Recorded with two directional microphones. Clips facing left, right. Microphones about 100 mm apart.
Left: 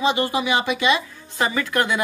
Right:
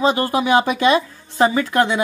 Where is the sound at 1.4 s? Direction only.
30° right (ahead or behind).